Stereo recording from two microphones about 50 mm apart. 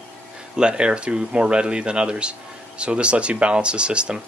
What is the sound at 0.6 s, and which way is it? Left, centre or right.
Speech, centre.